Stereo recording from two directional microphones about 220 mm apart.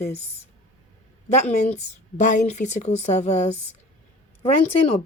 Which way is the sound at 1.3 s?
30° left (ahead or behind).